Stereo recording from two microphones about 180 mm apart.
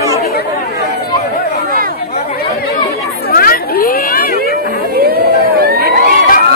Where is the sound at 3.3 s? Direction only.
55° left (ahead or behind).